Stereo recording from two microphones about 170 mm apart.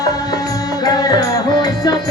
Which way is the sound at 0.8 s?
25° left (ahead or behind).